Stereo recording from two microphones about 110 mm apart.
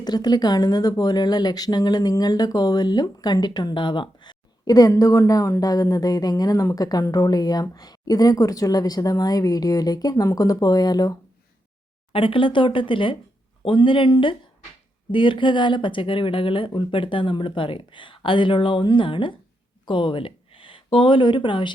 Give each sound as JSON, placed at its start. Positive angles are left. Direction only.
{"t": 0.0, "sound": "speech", "side_deg": 40}
{"t": 12.1, "sound": "speech", "side_deg": 55}